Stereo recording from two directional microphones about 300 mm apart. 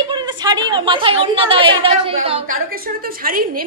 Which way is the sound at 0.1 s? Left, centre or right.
Centre.